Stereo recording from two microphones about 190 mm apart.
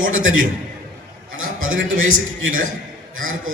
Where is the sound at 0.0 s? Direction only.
90° right.